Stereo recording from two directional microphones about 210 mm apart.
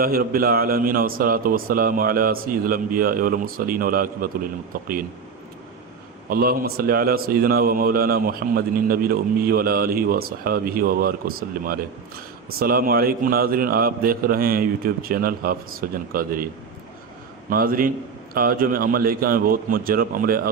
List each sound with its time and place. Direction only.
0.0 s a man's voice: 45° right (ahead or behind)
6.3 s a man's voice: 45° right (ahead or behind)
17.5 s a man's voice: 45° right (ahead or behind)